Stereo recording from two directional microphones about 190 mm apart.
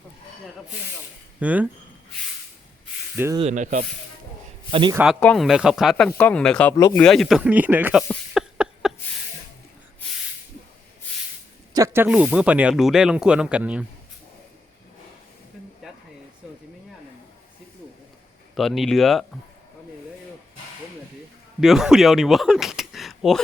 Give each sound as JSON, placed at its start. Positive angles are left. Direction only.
{"t": 1.4, "sound": "speech", "side_deg": -10}
{"t": 3.3, "sound": "rub", "side_deg": -35}
{"t": 4.7, "sound": "a man's voice", "side_deg": -25}
{"t": 5.2, "sound": "speech", "side_deg": 0}
{"t": 6.1, "sound": "speech", "side_deg": 10}
{"t": 6.7, "sound": "speech", "side_deg": 15}
{"t": 7.0, "sound": "speech", "side_deg": 0}
{"t": 11.7, "sound": "speech", "side_deg": -15}
{"t": 12.0, "sound": "speech", "side_deg": -5}
{"t": 18.5, "sound": "speech", "side_deg": 0}
{"t": 21.6, "sound": "speech", "side_deg": 0}